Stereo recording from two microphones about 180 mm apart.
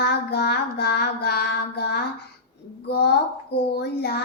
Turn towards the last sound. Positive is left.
turn(degrees=65)  # may be behind; listen again after turning